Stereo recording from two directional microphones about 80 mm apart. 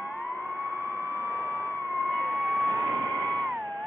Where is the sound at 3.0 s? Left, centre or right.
Left.